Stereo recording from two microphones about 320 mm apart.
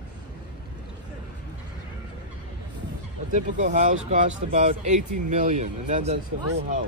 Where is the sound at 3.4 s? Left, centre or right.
Right.